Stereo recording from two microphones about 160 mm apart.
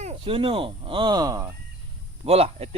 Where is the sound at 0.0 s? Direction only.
40° right (ahead or behind); by 1.5 s 20° right (ahead or behind).